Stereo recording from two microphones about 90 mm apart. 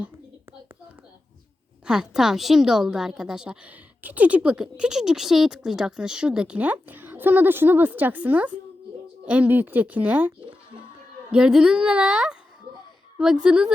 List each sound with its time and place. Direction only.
1.9 s a woman's voice: 5° right (ahead or behind)
13.4 s a woman's voice: 10° right (ahead or behind)